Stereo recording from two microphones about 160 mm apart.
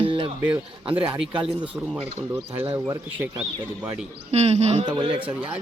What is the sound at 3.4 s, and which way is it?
Speech, 5° right (ahead or behind).